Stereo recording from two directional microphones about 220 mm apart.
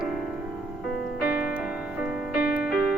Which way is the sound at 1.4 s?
5° right (ahead or behind).